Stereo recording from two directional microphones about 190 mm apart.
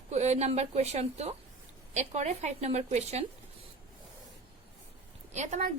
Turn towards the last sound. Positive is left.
turn(degrees=-35)  # may be behind; listen again after turning